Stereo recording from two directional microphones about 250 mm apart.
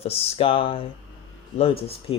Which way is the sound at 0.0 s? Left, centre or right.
Left.